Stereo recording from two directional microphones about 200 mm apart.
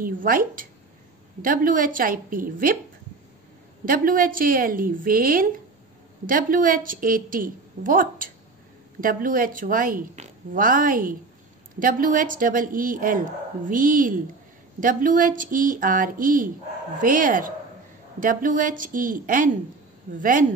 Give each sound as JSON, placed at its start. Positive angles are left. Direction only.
{"t": 0.0, "sound": "a woman's voice", "side_deg": -45}
{"t": 3.8, "sound": "a woman's voice", "side_deg": -45}